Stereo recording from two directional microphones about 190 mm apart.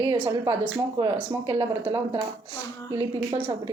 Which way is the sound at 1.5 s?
30° right (ahead or behind).